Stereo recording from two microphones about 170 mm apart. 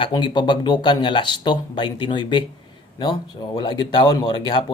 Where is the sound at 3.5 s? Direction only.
25° left (ahead or behind).